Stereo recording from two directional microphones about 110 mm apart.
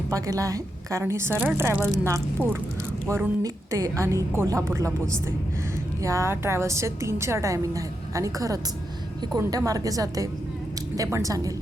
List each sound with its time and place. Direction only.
0.1 s a woman's voice: 30° right (ahead or behind)